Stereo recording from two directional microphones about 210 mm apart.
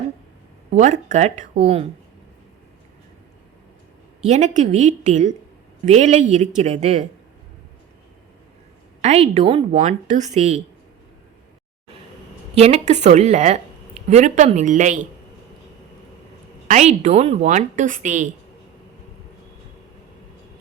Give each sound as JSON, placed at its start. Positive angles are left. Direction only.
{"t": 0.7, "sound": "speech", "side_deg": -35}
{"t": 4.3, "sound": "speech", "side_deg": -35}
{"t": 9.0, "sound": "speech", "side_deg": -30}
{"t": 12.5, "sound": "speech", "side_deg": -30}
{"t": 16.6, "sound": "speech", "side_deg": -35}